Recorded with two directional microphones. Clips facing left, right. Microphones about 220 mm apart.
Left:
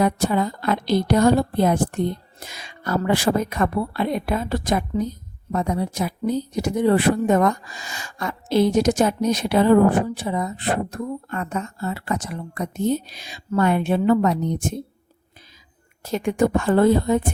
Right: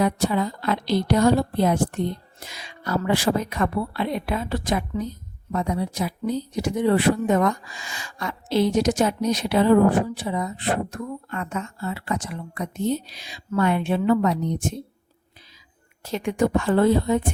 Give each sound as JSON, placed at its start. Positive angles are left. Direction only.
{"t": 0.0, "sound": "a woman's voice", "side_deg": 50}
{"t": 16.0, "sound": "a woman's voice", "side_deg": 45}